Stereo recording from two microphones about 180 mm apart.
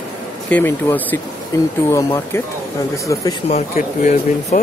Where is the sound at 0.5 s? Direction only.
10° left (ahead or behind).